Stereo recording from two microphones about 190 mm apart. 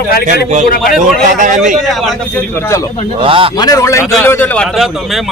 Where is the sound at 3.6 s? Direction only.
20° left (ahead or behind); by 5.3 s centre (ahead or behind).